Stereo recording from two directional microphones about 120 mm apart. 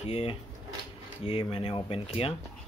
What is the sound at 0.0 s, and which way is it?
Speech, 55° left (ahead or behind).